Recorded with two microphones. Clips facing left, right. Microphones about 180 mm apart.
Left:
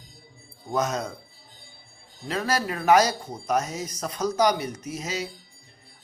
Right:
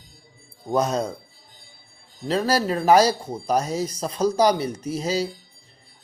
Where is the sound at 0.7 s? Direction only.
30° right (ahead or behind).